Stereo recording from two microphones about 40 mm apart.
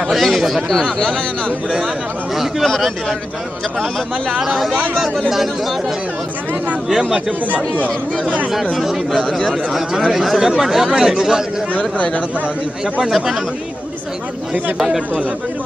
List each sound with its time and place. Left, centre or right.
0.1 s a sound: centre
0.9 s speech: centre
2.6 s a man's voice: centre
4.4 s a man's voice: centre
6.9 s speech: centre
8.7 s a man's voice: centre
13.0 s speech: centre